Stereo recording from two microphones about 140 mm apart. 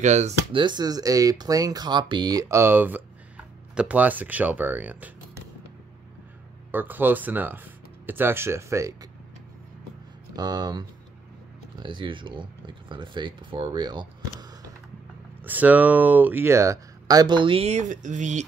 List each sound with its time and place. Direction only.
0.0 s speech: 55° right (ahead or behind)
0.5 s speech: 35° right (ahead or behind); by 5.1 s 10° right (ahead or behind)
6.7 s speech: 15° right (ahead or behind)
10.3 s speech: 30° right (ahead or behind)
15.4 s speech: 10° right (ahead or behind); by 18.4 s 60° right (ahead or behind)